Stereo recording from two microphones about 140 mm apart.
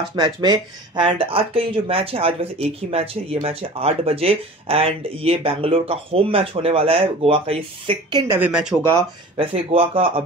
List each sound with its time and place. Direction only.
0.1 s speech: 30° right (ahead or behind)
8.3 s speech: 10° right (ahead or behind)
8.9 s speech: 45° right (ahead or behind)